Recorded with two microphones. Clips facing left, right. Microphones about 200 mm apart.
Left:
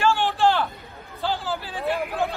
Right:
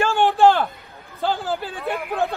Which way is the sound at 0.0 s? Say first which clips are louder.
Right 5 dB; 50° right (ahead or behind).